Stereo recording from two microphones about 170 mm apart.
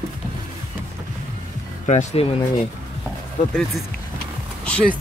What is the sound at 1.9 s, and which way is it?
Speech, 45° left (ahead or behind).